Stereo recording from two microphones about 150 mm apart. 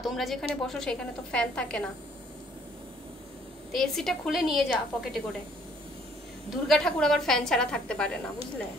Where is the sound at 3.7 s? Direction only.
Centre (ahead or behind).